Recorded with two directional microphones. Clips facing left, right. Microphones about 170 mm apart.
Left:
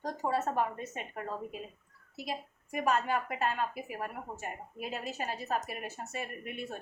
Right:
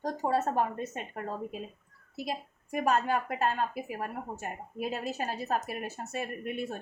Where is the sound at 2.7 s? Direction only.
40° right (ahead or behind).